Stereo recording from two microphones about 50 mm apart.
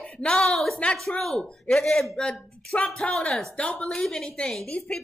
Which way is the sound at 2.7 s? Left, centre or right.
Left.